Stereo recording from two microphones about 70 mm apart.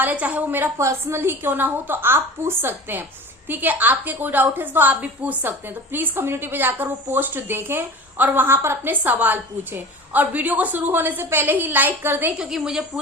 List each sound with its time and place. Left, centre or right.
0.0 s a woman's voice: right
0.8 s a woman's voice: right
8.9 s a woman's voice: right
12.3 s a woman's voice: centre